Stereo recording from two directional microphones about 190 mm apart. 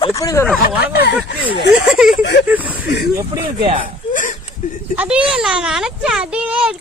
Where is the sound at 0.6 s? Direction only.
55° left (ahead or behind).